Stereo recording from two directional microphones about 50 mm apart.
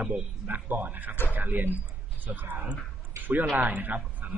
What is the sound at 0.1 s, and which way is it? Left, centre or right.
A man's voice, right.